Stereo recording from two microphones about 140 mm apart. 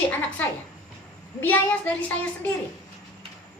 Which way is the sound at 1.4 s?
15° left (ahead or behind).